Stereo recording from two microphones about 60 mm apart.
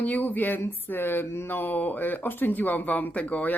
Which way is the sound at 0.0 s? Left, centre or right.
Left.